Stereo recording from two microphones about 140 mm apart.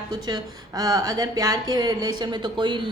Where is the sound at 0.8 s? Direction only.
25° right (ahead or behind).